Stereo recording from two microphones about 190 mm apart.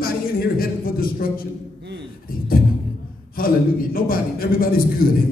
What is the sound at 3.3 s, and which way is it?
Music, 50° left (ahead or behind).